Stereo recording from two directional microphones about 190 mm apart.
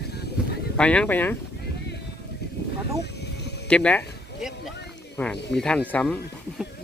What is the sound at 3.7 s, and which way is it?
Speech, 5° left (ahead or behind).